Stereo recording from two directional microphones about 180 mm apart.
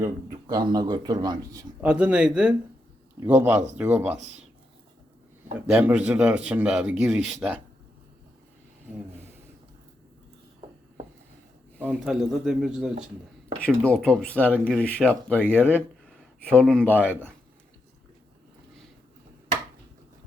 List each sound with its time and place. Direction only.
0.0 s speech: 20° right (ahead or behind)
1.8 s speech: 5° right (ahead or behind)
5.6 s speech: 5° right (ahead or behind)
11.9 s speech: 5° right (ahead or behind)
13.6 s speech: 5° left (ahead or behind)
15.4 s speech: 10° right (ahead or behind)
16.4 s speech: 5° left (ahead or behind)
17.0 s speech: 10° right (ahead or behind)